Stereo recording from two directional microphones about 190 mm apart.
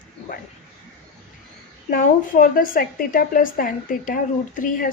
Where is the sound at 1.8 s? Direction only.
45° left (ahead or behind).